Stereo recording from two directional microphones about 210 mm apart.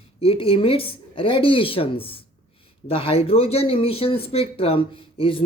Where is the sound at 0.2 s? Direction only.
25° left (ahead or behind).